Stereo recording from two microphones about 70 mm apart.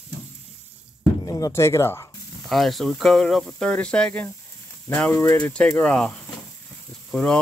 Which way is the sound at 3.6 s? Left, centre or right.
Centre.